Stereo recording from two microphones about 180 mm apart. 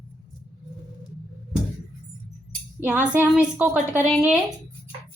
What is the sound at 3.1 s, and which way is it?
A woman's voice, 10° right (ahead or behind).